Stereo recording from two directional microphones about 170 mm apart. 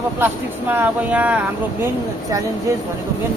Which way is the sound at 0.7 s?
10° right (ahead or behind).